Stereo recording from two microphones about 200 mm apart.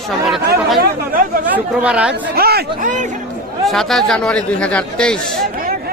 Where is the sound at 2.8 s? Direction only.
40° right (ahead or behind).